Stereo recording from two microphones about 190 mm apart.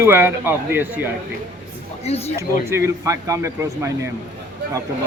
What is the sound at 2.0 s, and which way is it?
Speech, 35° left (ahead or behind).